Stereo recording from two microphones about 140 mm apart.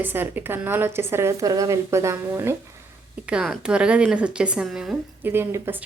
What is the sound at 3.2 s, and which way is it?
A woman's voice, 5° right (ahead or behind).